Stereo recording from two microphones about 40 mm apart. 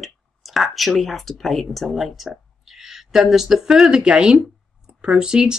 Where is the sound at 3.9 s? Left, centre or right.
Centre.